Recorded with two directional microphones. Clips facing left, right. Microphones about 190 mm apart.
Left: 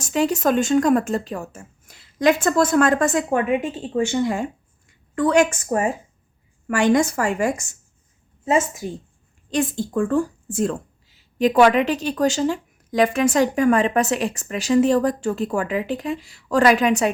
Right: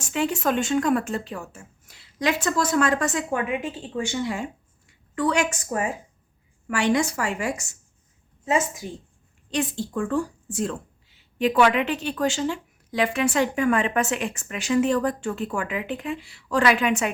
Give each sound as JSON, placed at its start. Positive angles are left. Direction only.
{"t": 0.0, "sound": "speech", "side_deg": 40}
{"t": 9.5, "sound": "speech", "side_deg": 45}